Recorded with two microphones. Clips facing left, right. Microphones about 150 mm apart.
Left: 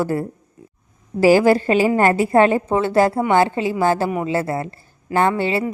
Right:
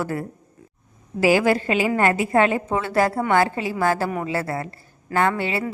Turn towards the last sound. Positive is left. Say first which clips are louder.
# left 4 dB
turn(degrees=30)  # may be behind; listen again after turning